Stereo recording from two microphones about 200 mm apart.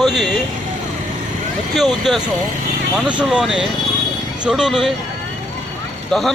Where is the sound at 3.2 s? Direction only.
Centre (ahead or behind).